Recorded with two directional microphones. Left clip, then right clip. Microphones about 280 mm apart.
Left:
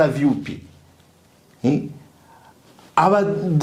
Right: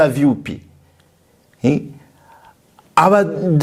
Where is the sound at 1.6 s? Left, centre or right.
Right.